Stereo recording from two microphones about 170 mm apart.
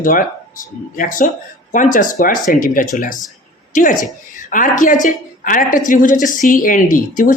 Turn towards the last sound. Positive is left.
turn(degrees=50)  # may be behind; listen again after turning